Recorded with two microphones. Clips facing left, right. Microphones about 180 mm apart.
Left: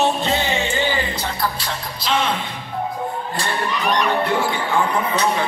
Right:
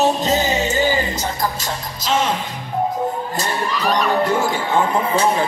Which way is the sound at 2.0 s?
45° right (ahead or behind).